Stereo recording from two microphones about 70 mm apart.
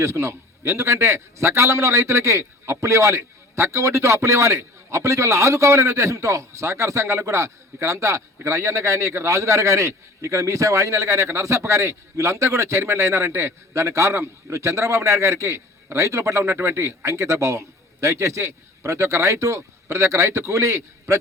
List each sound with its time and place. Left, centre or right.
0.0 s a man's voice: right